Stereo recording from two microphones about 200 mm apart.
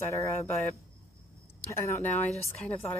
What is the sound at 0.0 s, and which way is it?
Speech, 15° left (ahead or behind).